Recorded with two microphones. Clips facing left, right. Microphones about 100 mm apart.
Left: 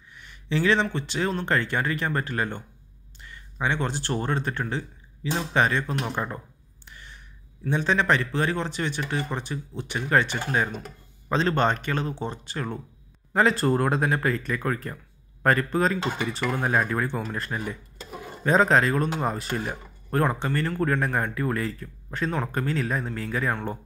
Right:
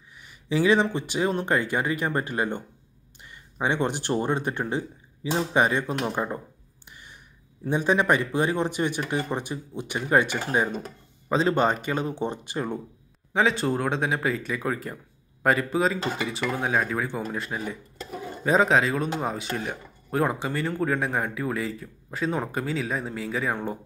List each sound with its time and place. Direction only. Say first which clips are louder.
0.1 s speech: right 1 dB; 10° right (ahead or behind)
6.9 s a sound: left 1 dB; 15° right (ahead or behind)
7.7 s speech: right 1 dB; 15° right (ahead or behind)
13.3 s speech: left 2 dB; centre (ahead or behind)